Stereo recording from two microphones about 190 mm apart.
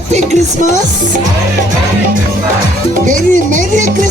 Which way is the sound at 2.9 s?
45° right (ahead or behind).